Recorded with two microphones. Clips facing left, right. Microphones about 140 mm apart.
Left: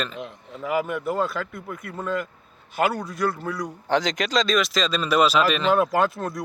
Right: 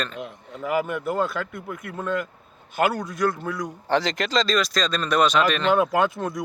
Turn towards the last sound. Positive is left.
turn(degrees=0)  # may be behind; listen again after turning